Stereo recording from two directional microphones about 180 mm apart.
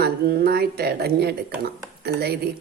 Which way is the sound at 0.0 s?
60° right (ahead or behind).